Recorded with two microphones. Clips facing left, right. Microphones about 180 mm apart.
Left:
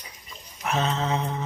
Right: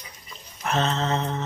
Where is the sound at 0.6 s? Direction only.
10° left (ahead or behind).